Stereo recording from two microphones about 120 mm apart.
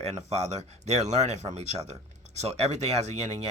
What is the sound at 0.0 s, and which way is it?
Speech, 65° right (ahead or behind).